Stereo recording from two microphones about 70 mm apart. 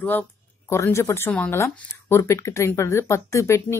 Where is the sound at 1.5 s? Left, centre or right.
Left.